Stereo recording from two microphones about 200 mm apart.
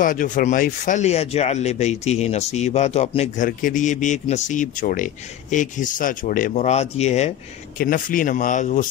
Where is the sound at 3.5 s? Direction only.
45° left (ahead or behind).